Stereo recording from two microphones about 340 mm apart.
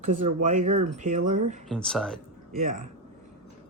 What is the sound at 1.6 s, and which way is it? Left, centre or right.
Speech, centre.